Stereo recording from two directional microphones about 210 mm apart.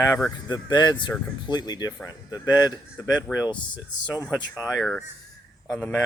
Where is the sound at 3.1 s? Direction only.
5° left (ahead or behind).